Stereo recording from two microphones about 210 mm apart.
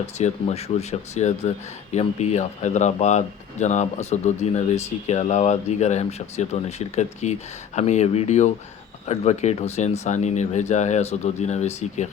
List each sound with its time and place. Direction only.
0.2 s speech: 30° left (ahead or behind)